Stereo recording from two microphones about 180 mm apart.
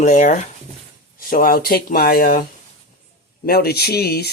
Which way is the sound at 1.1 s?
50° left (ahead or behind).